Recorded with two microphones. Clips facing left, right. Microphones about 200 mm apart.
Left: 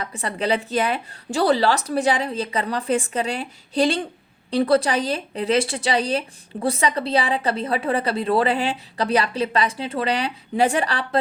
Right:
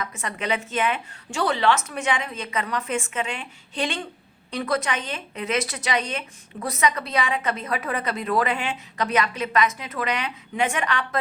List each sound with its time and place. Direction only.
0.0 s speech: 35° left (ahead or behind)